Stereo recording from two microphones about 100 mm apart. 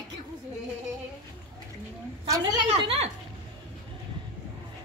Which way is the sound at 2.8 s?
75° right (ahead or behind).